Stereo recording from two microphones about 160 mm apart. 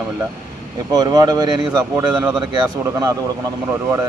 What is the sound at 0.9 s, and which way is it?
Speech, 25° right (ahead or behind).